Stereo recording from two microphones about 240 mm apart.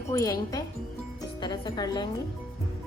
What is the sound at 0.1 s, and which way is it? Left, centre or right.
Speech, centre.